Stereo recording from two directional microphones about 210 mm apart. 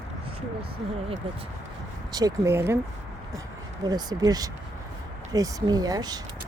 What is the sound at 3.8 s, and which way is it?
Speech, 20° right (ahead or behind).